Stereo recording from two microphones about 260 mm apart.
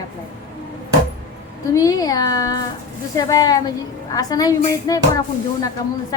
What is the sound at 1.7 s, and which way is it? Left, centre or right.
A woman's voice, centre.